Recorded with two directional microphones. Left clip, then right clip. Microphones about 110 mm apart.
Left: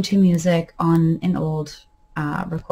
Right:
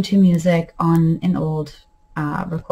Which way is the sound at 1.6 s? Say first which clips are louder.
Left 2 dB; 35° left (ahead or behind).